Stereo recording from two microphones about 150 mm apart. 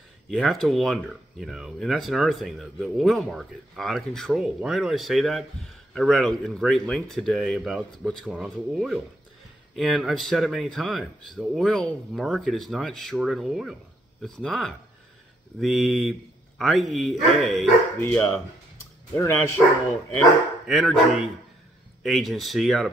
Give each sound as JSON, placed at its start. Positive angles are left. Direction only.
{"t": 0.3, "sound": "speech", "side_deg": 0}
{"t": 17.9, "sound": "speech", "side_deg": 10}
{"t": 20.6, "sound": "speech", "side_deg": 0}